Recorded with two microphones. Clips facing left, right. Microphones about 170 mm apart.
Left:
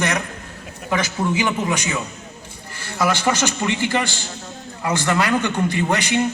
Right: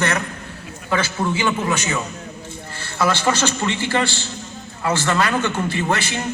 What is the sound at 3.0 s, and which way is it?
A man's voice, 10° left (ahead or behind).